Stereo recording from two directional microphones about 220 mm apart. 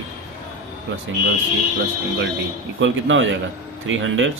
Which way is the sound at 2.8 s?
60° right (ahead or behind).